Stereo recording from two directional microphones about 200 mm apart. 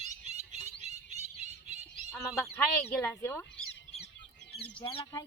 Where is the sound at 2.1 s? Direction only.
5° left (ahead or behind).